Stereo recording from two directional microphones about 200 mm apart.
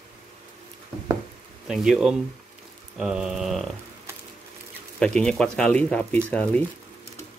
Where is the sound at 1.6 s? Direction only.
Centre (ahead or behind).